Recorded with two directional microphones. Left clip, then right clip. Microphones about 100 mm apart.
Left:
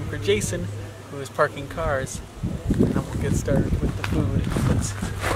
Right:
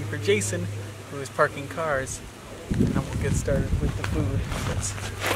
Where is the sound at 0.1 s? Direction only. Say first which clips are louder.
Left 1 dB; 5° left (ahead or behind).